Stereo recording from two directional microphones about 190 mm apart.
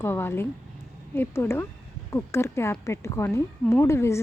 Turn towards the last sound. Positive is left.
turn(degrees=15)  # may be behind; listen again after turning